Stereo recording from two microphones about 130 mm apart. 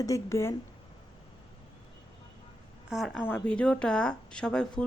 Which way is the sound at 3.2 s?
15° left (ahead or behind).